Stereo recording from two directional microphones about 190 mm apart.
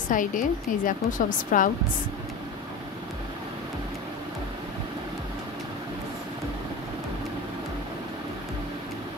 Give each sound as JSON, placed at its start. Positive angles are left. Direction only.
{"t": 0.1, "sound": "a woman's voice", "side_deg": 45}